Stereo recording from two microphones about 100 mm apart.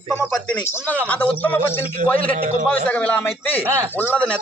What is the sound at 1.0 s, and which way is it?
A man's voice, 15° left (ahead or behind).